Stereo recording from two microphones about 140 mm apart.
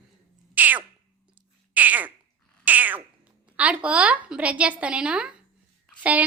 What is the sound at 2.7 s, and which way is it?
Cat, 10° right (ahead or behind).